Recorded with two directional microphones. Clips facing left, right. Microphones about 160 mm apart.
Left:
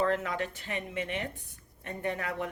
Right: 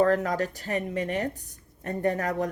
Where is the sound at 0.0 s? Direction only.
40° right (ahead or behind).